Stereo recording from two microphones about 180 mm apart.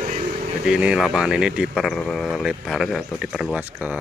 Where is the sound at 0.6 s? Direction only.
5° right (ahead or behind).